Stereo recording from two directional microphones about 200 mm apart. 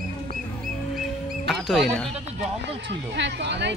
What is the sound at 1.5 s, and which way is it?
Music, centre (ahead or behind).